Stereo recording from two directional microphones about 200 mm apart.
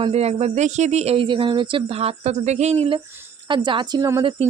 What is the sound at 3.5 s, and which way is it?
Speech, 25° right (ahead or behind).